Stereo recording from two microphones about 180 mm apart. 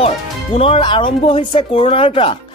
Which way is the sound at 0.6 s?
30° left (ahead or behind).